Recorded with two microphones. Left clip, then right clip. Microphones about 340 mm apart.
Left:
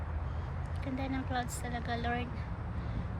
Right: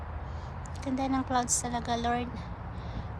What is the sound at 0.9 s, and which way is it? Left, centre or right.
Speech, centre.